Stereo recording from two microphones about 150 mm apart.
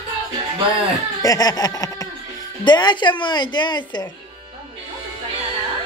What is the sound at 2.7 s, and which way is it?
A woman's voice, 30° left (ahead or behind).